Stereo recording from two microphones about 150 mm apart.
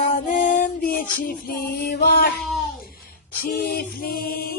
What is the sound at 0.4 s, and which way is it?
Music, 70° left (ahead or behind).